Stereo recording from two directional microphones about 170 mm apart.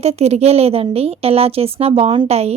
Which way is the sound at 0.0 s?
40° right (ahead or behind).